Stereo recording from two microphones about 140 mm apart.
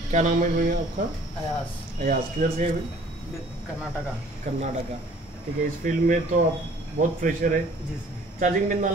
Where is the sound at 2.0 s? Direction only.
85° right.